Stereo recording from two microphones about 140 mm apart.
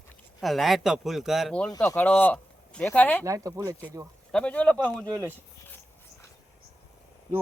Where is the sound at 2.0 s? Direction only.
10° left (ahead or behind).